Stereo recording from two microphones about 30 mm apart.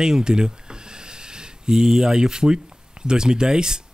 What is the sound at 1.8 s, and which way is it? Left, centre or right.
Speech, centre.